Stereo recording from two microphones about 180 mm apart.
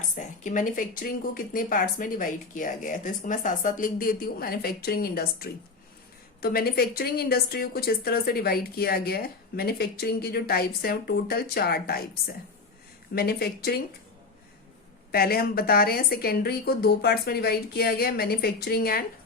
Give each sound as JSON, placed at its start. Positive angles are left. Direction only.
{"t": 0.2, "sound": "a woman's voice", "side_deg": 45}
{"t": 13.1, "sound": "a woman's voice", "side_deg": 60}
{"t": 15.1, "sound": "a woman's voice", "side_deg": 55}